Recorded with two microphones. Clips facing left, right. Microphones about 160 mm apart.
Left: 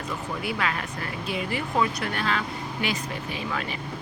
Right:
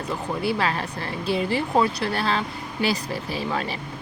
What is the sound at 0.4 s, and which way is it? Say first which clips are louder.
A woman's voice: right 5 dB; 30° right (ahead or behind).